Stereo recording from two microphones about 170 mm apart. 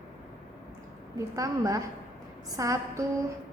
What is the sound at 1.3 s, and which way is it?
A woman's voice, 20° right (ahead or behind).